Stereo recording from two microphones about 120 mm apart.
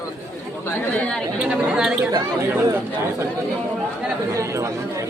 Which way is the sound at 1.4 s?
10° right (ahead or behind).